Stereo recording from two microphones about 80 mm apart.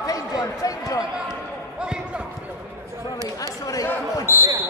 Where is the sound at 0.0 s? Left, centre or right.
Left.